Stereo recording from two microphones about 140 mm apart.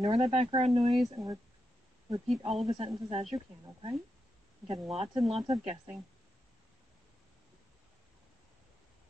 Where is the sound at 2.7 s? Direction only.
45° right (ahead or behind).